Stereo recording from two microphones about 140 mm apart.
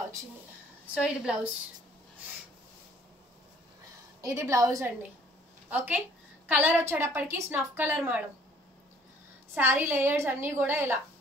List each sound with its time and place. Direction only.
0.9 s a woman's voice: 5° right (ahead or behind)
4.2 s a woman's voice: 20° right (ahead or behind)
9.6 s a woman's voice: 15° right (ahead or behind)